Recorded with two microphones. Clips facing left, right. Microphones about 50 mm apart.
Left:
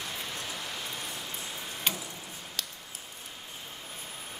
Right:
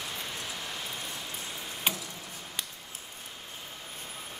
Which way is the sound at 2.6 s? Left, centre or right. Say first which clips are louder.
Even; centre.